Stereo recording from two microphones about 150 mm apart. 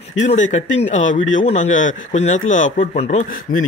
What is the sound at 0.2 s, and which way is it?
Speech, 50° left (ahead or behind).